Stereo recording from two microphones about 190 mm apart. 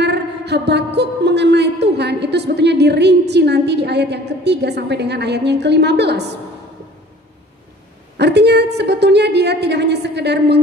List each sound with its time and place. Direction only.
0.0 s speech: 60° right (ahead or behind)
8.2 s a woman's voice: 60° right (ahead or behind)